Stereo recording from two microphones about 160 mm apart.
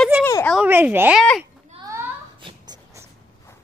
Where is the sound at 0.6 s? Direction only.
10° right (ahead or behind).